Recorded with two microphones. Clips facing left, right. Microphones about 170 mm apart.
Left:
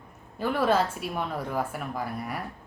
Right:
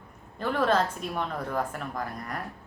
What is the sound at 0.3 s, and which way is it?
A woman's voice, 10° left (ahead or behind).